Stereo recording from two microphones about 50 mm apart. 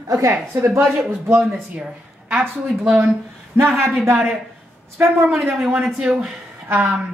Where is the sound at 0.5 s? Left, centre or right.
Right.